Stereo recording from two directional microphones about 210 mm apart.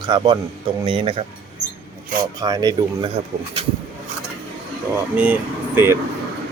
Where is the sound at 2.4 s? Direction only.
20° right (ahead or behind).